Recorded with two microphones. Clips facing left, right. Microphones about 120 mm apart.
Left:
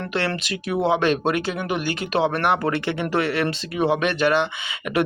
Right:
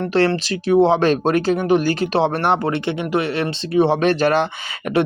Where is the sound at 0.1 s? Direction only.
35° right (ahead or behind).